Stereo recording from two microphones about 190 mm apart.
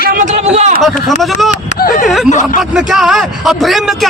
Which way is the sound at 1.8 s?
45° left (ahead or behind).